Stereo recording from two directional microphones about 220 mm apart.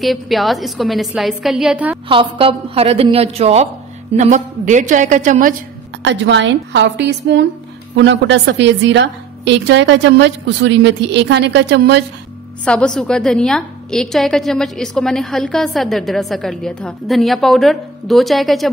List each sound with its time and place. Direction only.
0.0 s a woman's voice: centre (ahead or behind)
2.0 s a woman's voice: 25° right (ahead or behind)
6.0 s a woman's voice: 55° right (ahead or behind)
12.6 s a woman's voice: 5° left (ahead or behind)